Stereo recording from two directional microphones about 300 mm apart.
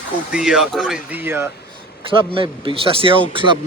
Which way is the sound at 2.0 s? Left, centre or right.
Centre.